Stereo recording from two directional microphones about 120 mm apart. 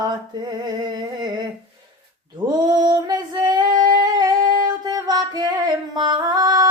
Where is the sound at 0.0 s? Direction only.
35° right (ahead or behind).